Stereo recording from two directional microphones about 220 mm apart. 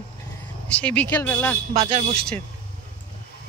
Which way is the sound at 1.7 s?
30° right (ahead or behind).